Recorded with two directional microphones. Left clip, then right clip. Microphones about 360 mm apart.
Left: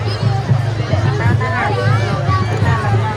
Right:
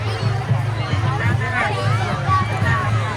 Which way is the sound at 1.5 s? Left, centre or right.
Left.